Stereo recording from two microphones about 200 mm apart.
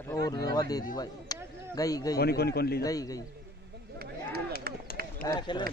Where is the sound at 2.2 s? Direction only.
50° left (ahead or behind).